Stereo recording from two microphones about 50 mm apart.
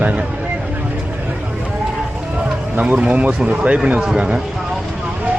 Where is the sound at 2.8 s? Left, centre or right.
Right.